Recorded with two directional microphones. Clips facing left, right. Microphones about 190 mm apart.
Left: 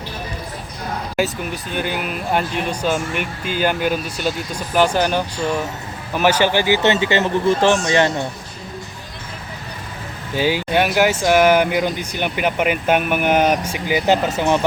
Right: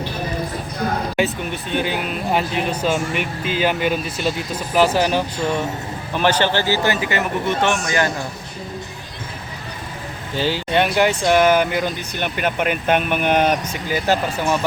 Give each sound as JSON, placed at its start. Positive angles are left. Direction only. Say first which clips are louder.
{"t": 1.1, "sound": "a man's voice", "louder": "even", "side_deg": 0}
{"t": 10.3, "sound": "speech", "louder": "left 1 dB", "side_deg": 10}